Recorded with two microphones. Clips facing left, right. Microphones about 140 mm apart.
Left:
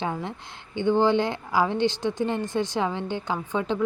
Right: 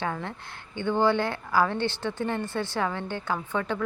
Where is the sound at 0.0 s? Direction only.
15° left (ahead or behind).